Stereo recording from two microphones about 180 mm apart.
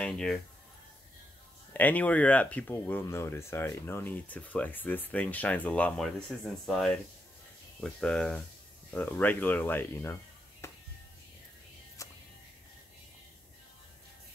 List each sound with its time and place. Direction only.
0.0 s speech: 5° left (ahead or behind)
1.7 s speech: 10° left (ahead or behind)
10.6 s music: 15° left (ahead or behind)
12.0 s music: 15° left (ahead or behind)